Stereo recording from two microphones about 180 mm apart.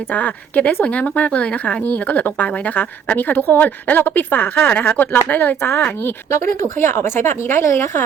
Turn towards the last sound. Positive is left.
turn(degrees=15)  # may be behind; listen again after turning